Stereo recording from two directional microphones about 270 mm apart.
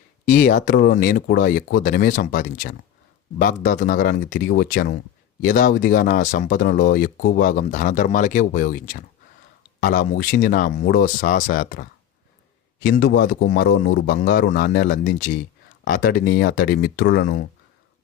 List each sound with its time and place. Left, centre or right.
0.3 s speech: left